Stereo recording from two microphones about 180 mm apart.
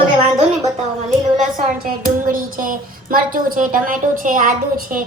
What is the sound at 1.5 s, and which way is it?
A woman's voice, 50° right (ahead or behind).